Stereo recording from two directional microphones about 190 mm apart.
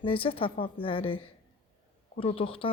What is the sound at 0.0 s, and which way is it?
Speech, 30° left (ahead or behind).